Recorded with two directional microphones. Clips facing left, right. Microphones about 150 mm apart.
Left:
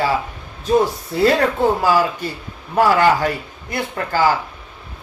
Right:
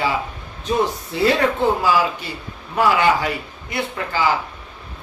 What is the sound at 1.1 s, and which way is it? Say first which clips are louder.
Speech: left 2 dB; 45° left (ahead or behind).